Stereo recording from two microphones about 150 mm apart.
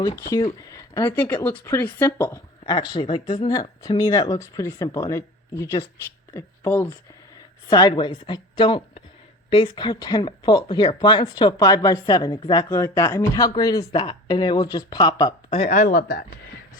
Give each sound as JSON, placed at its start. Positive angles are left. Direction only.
{"t": 0.2, "sound": "speech", "side_deg": 25}
{"t": 1.1, "sound": "a woman's voice", "side_deg": 10}
{"t": 2.6, "sound": "a woman's voice", "side_deg": 30}
{"t": 7.7, "sound": "a woman's voice", "side_deg": 30}
{"t": 12.7, "sound": "speech", "side_deg": 20}
{"t": 15.5, "sound": "speech", "side_deg": 50}